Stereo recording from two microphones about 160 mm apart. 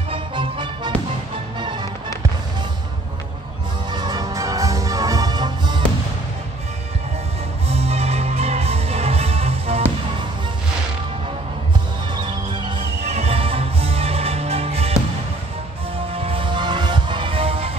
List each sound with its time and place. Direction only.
0.1 s music: 30° right (ahead or behind)
3.9 s music: 25° right (ahead or behind)
7.6 s music: 40° right (ahead or behind)
12.2 s music: 30° right (ahead or behind)
16.1 s music: 35° right (ahead or behind)